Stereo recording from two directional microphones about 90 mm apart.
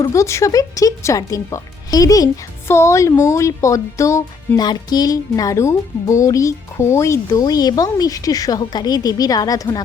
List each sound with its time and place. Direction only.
0.1 s speech: 35° left (ahead or behind)
2.6 s speech: 30° left (ahead or behind)
4.5 s speech: 50° left (ahead or behind); by 7.4 s 35° left (ahead or behind)
7.4 s a woman's voice: 45° left (ahead or behind)